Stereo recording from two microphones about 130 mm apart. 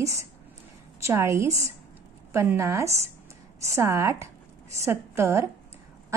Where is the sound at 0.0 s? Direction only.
25° right (ahead or behind).